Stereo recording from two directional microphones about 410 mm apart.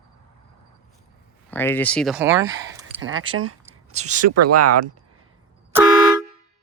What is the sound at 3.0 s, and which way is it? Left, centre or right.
Speech, right.